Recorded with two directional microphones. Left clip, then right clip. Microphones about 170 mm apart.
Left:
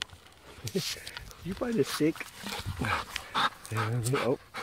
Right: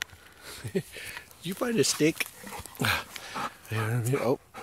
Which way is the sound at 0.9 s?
30° right (ahead or behind).